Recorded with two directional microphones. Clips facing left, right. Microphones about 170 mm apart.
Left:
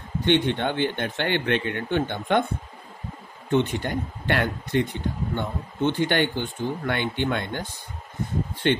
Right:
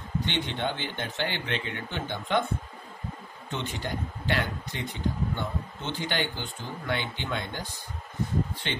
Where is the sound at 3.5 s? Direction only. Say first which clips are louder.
Left 10 dB; 55° left (ahead or behind).